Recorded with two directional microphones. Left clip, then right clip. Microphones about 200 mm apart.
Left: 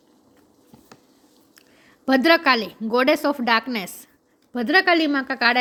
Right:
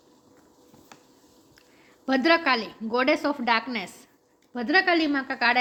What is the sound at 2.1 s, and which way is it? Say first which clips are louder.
Speech: left 5 dB; 45° left (ahead or behind).